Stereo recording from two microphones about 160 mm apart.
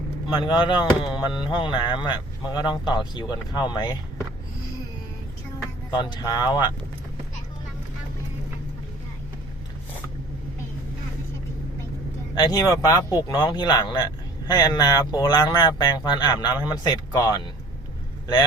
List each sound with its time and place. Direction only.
0.3 s speech: 30° left (ahead or behind)
6.0 s speech: 25° left (ahead or behind)
12.3 s speech: 25° left (ahead or behind)